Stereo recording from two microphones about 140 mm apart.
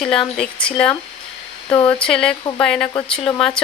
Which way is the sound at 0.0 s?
5° left (ahead or behind).